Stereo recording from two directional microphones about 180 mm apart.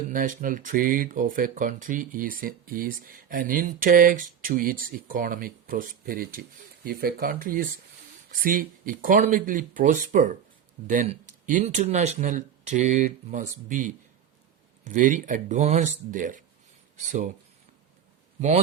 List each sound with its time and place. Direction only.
0.1 s speech: 50° right (ahead or behind)
18.3 s a man's voice: 40° right (ahead or behind)